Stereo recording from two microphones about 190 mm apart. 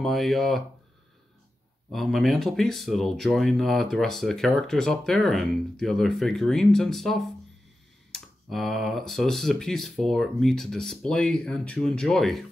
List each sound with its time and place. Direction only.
0.0 s speech: centre (ahead or behind)
1.9 s speech: centre (ahead or behind)